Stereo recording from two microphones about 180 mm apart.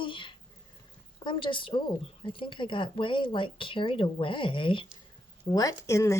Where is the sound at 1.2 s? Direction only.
25° left (ahead or behind).